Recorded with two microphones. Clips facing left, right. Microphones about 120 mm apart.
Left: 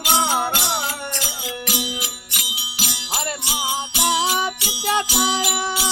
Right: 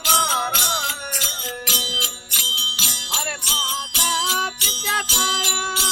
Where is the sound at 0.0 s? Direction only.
Centre (ahead or behind).